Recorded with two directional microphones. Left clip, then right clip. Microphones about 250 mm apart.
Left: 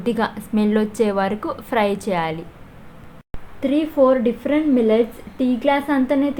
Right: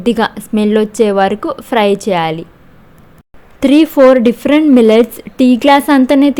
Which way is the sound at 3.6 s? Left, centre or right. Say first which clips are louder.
Right 10 dB; right.